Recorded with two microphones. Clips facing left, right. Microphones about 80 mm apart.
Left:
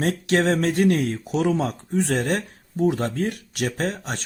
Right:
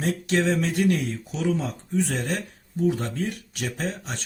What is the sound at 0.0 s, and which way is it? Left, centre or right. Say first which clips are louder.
Speech: left 3 dB; left.